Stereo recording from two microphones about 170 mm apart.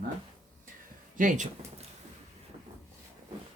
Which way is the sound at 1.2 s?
50° right (ahead or behind).